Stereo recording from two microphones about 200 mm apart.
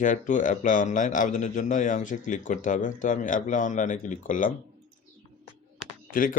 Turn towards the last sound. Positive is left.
turn(degrees=45)  # may be behind; listen again after turning